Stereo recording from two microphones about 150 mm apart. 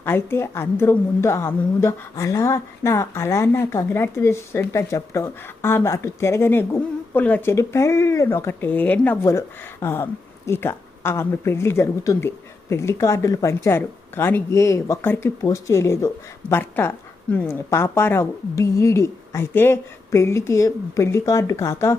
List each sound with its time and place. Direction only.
0.0 s a woman's voice: 15° left (ahead or behind)